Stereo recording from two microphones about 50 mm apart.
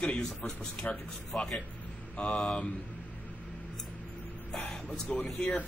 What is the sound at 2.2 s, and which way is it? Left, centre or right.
Speech, centre.